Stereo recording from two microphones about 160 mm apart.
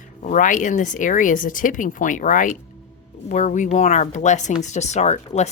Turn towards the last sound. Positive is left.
turn(degrees=45)  # may be behind; listen again after turning